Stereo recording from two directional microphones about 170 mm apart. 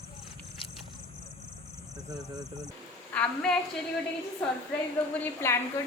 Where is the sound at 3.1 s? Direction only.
5° left (ahead or behind).